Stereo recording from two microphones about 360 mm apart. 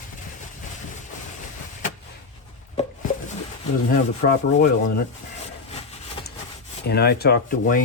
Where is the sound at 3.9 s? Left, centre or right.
Left.